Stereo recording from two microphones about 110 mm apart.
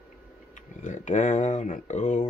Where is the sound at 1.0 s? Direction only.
90° left.